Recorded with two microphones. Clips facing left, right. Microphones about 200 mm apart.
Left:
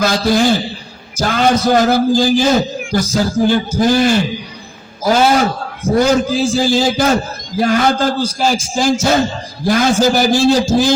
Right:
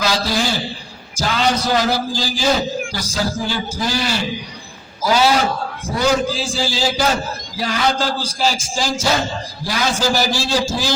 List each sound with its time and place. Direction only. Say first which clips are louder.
0.0 s a man's voice: left 7 dB; 50° left (ahead or behind)